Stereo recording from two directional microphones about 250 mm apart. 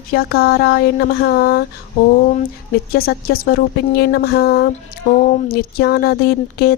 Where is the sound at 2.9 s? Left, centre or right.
Left.